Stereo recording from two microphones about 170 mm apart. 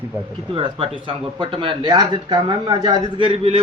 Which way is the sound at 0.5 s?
35° right (ahead or behind).